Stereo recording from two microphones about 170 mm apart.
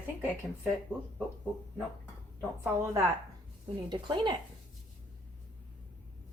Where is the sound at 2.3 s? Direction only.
15° right (ahead or behind).